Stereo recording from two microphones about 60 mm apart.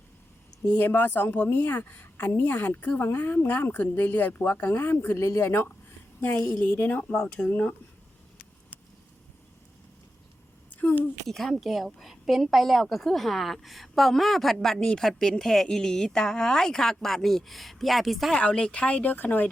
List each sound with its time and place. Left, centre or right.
0.8 s a woman's voice: left
6.1 s speech: left
7.1 s speech: centre
10.8 s a sound: left
11.3 s a woman's voice: centre
18.3 s speech: left